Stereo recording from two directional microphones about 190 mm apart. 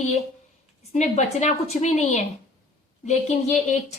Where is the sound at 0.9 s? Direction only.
35° left (ahead or behind).